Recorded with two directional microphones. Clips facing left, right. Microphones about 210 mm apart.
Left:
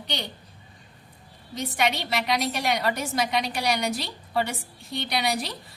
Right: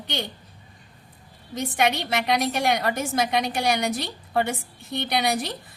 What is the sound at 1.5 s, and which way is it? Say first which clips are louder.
A woman's voice: right 3 dB; 50° right (ahead or behind).